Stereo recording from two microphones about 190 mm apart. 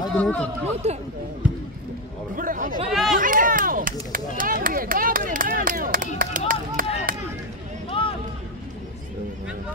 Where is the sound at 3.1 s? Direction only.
45° right (ahead or behind).